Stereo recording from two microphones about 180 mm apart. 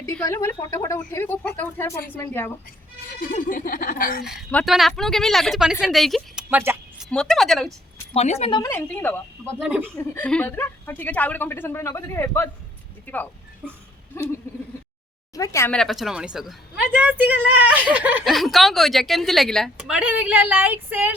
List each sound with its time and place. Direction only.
0.0 s a woman's voice: 15° left (ahead or behind)
3.2 s speech: 50° left (ahead or behind)
4.5 s a woman's voice: centre (ahead or behind)
6.5 s speech: 10° right (ahead or behind)
7.0 s a woman's voice: 5° left (ahead or behind)
8.1 s speech: 35° left (ahead or behind)
8.7 s a woman's voice: 10° left (ahead or behind)
9.4 s speech: 5° right (ahead or behind)
10.0 s a woman's voice: 10° left (ahead or behind)
15.4 s a woman's voice: 15° left (ahead or behind)
15.7 s a woman's voice: centre (ahead or behind)